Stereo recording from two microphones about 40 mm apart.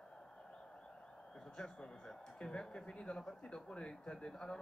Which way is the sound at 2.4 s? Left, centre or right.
Left.